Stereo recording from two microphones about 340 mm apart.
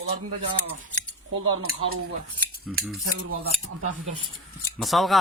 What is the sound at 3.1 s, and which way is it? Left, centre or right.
Speech, right.